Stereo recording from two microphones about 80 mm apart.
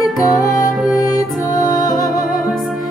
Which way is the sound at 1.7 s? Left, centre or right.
Left.